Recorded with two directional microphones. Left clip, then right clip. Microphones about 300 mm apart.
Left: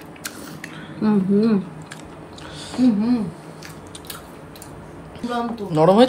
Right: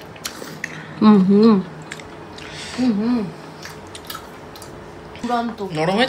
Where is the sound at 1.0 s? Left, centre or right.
Right.